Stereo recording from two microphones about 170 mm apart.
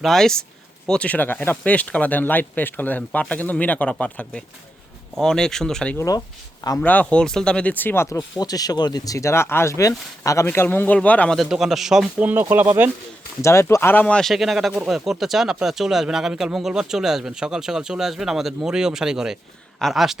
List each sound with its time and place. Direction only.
0.0 s speech: centre (ahead or behind)
6.0 s speech: 20° left (ahead or behind)
6.8 s speech: 10° left (ahead or behind); by 12.9 s 10° right (ahead or behind)
13.4 s speech: 15° left (ahead or behind); by 20.1 s centre (ahead or behind)